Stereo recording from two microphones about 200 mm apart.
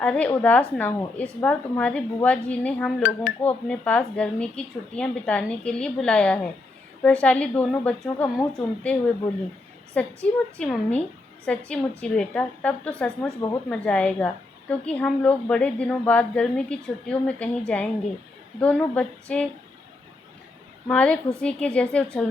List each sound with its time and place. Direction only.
0.0 s speech: 5° left (ahead or behind)
20.8 s speech: 5° left (ahead or behind)